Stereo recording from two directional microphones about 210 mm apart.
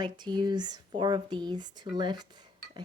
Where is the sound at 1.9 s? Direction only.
20° right (ahead or behind).